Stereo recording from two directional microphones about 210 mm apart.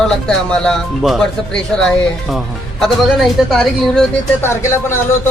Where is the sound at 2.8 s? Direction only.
Centre (ahead or behind).